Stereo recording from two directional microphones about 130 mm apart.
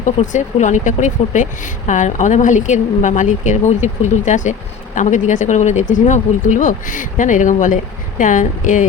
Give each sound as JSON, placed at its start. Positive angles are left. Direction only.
{"t": 0.0, "sound": "speech", "side_deg": 70}